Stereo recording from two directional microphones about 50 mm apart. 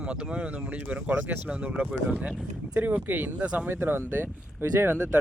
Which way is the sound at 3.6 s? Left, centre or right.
Right.